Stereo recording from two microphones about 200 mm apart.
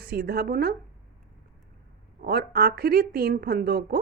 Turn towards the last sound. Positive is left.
turn(degrees=-50)  # may be behind; listen again after turning